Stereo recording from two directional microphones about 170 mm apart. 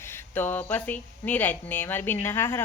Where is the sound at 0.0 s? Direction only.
15° left (ahead or behind).